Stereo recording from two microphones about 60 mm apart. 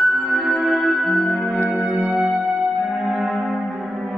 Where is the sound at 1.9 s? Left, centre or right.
Centre.